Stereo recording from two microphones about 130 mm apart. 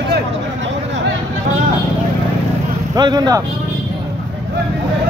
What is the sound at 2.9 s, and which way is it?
Speech, 30° right (ahead or behind).